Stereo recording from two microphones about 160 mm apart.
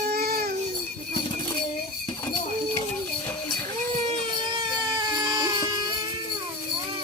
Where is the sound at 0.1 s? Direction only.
70° right (ahead or behind).